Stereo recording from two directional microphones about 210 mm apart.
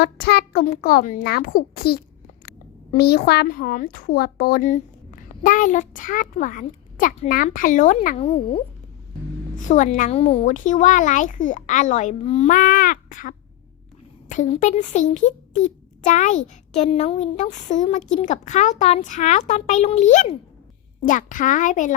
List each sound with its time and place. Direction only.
0.0 s a child's voice: 50° left (ahead or behind); by 8.4 s 30° left (ahead or behind)
9.6 s a woman's voice: 35° left (ahead or behind)